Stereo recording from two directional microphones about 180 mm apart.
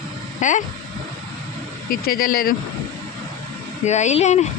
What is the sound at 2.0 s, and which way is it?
Speech, 55° left (ahead or behind).